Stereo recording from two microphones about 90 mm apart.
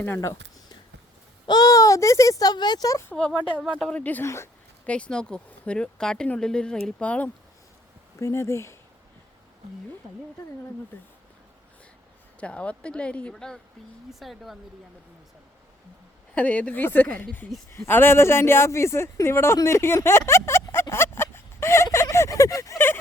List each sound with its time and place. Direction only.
0.2 s a sound: 40° left (ahead or behind)
1.5 s speech: 45° left (ahead or behind)
3.2 s speech: 10° left (ahead or behind)
4.2 s speech: 30° left (ahead or behind)
4.9 s speech: 10° left (ahead or behind)
8.2 s speech: 30° left (ahead or behind)
12.4 s speech: 15° left (ahead or behind); by 14.6 s centre (ahead or behind)
16.3 s speech: 15° left (ahead or behind)
20.9 s a sound: 25° left (ahead or behind)
21.9 s fowl: 35° left (ahead or behind)